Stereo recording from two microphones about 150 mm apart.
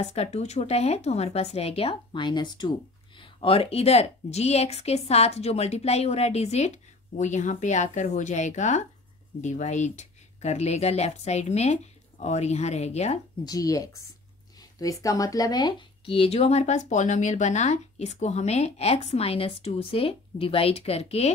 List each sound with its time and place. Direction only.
0.0 s speech: 45° left (ahead or behind); by 2.7 s 30° left (ahead or behind)
3.2 s speech: 40° left (ahead or behind)
13.5 s speech: 25° left (ahead or behind); by 21.3 s 45° left (ahead or behind)